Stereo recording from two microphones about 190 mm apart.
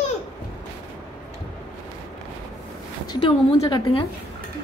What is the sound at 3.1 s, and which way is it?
Speech, 25° left (ahead or behind).